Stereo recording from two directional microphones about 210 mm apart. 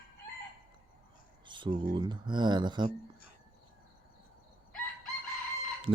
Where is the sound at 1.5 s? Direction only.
25° right (ahead or behind).